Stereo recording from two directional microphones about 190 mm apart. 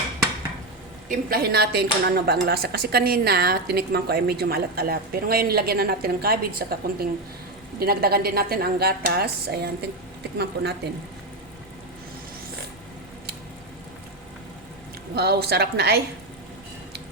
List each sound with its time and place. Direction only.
1.0 s a woman's voice: 45° right (ahead or behind)
15.1 s a woman's voice: 60° right (ahead or behind)